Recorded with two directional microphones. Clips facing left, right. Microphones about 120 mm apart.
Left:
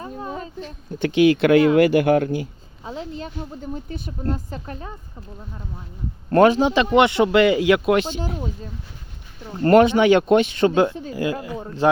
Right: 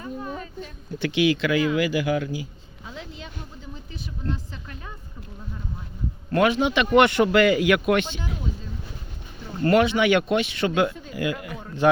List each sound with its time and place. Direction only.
0.0 s a sound: 30° left (ahead or behind)
0.9 s speech: 45° left (ahead or behind)
2.8 s speech: 35° left (ahead or behind)
6.3 s speech: 40° left (ahead or behind)
6.8 s speech: 20° left (ahead or behind); by 8.4 s 40° left (ahead or behind)
9.6 s speech: 45° left (ahead or behind); by 11.9 s 25° left (ahead or behind)